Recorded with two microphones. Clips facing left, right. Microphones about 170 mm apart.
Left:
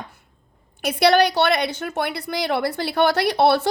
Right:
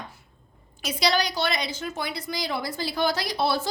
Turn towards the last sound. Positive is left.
turn(degrees=65)  # may be behind; listen again after turning